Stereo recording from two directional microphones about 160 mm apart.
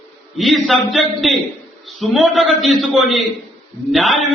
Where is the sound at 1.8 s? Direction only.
Centre (ahead or behind).